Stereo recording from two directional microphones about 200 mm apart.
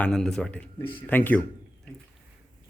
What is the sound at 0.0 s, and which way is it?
Speech, 5° left (ahead or behind).